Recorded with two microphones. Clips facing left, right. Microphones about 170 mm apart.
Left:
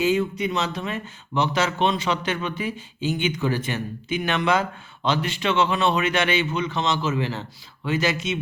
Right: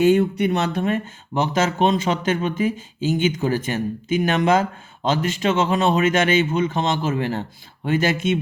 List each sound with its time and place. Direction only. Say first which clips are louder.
0.0 s speech: right 6 dB; 60° right (ahead or behind)